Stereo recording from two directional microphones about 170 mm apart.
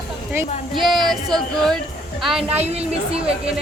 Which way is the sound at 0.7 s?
Centre (ahead or behind).